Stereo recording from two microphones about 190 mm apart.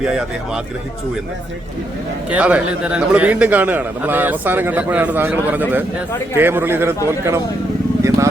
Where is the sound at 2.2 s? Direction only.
5° right (ahead or behind).